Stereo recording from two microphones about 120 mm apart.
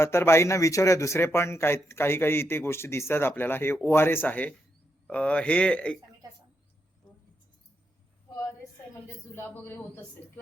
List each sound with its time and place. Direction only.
0.0 s speech: 20° left (ahead or behind)
9.3 s speech: 20° left (ahead or behind)